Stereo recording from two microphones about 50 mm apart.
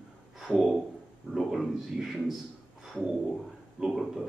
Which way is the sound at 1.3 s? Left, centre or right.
Centre.